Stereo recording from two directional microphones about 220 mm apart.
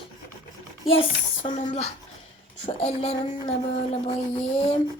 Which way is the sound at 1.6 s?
30° left (ahead or behind).